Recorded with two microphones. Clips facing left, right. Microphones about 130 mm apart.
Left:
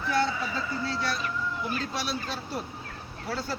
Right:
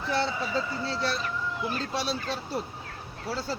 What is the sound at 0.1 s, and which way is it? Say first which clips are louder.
Speech: even; 30° right (ahead or behind).